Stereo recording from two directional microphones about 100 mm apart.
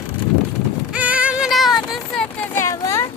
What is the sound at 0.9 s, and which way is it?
Music, 15° right (ahead or behind).